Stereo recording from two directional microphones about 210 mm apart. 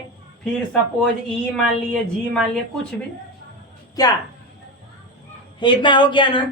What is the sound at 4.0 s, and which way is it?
Speech, 20° left (ahead or behind).